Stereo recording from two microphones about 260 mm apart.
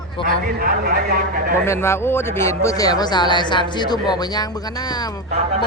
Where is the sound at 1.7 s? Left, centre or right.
Centre.